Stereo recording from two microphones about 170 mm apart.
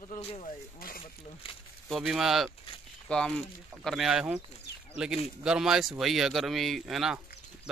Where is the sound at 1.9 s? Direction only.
Centre (ahead or behind).